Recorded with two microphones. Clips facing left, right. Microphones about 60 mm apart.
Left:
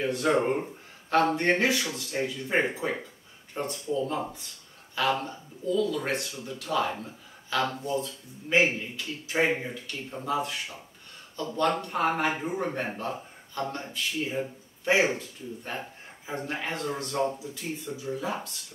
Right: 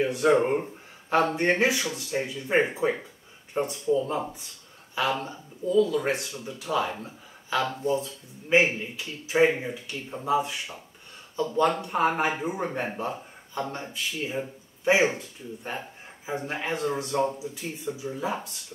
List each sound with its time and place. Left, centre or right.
0.0 s speech: centre
7.0 s a sound: centre
7.8 s speech: centre
14.9 s speech: centre